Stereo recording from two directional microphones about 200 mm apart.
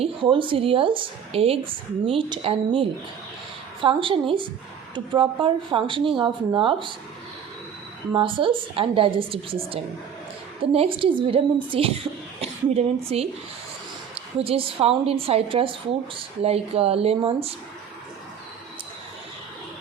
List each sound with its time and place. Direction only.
0.0 s a woman's voice: 25° right (ahead or behind)
8.1 s a woman's voice: 25° right (ahead or behind)
14.3 s a woman's voice: 30° right (ahead or behind)